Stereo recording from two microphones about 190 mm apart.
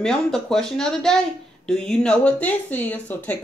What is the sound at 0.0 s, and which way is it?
Speech, 5° left (ahead or behind).